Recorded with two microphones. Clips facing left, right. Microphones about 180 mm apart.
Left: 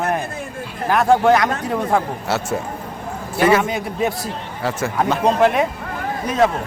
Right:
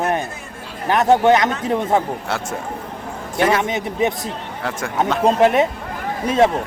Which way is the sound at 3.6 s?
20° right (ahead or behind).